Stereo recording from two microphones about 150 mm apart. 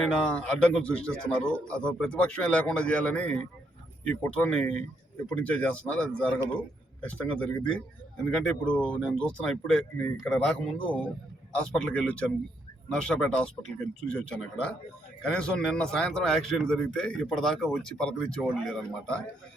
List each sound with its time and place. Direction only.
0.0 s speech: 5° left (ahead or behind)
11.7 s a man's voice: 5° left (ahead or behind)